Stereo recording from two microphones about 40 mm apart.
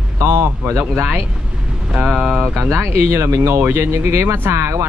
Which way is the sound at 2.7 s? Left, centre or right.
Right.